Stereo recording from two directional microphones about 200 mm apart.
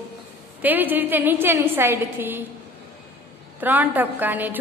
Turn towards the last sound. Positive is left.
turn(degrees=-10)  # may be behind; listen again after turning